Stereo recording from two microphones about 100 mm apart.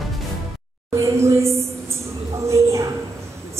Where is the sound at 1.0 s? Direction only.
30° right (ahead or behind).